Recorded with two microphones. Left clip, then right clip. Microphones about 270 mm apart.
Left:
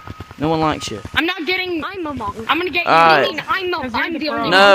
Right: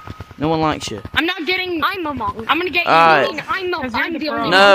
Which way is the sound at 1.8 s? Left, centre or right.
Centre.